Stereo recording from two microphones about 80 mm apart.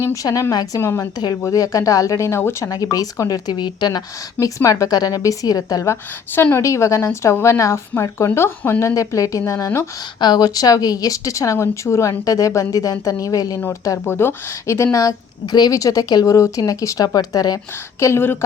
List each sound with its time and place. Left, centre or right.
0.0 s a woman's voice: left
0.8 s a woman's voice: left
2.9 s speech: left
4.4 s speech: left
5.8 s a woman's voice: left
10.2 s speech: left
14.1 s a woman's voice: left
14.9 s a woman's voice: left
18.0 s a woman's voice: left